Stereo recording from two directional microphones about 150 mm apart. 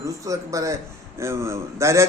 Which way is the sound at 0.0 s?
20° right (ahead or behind).